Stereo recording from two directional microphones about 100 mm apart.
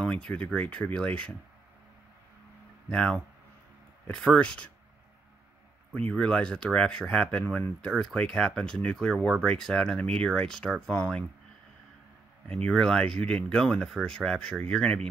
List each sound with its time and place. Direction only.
0.0 s speech: 10° left (ahead or behind)
2.9 s speech: 10° left (ahead or behind)
5.9 s speech: 10° left (ahead or behind)
12.6 s speech: 5° left (ahead or behind)